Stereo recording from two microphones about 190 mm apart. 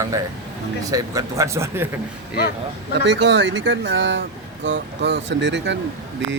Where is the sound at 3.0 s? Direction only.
65° right (ahead or behind).